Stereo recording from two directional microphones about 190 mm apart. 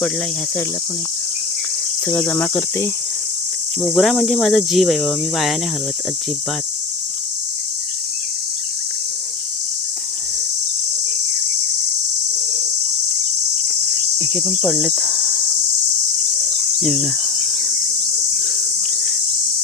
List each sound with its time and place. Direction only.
2.0 s cricket: 10° left (ahead or behind)
3.8 s speech: centre (ahead or behind)
14.2 s cricket: centre (ahead or behind)
16.8 s speech: centre (ahead or behind)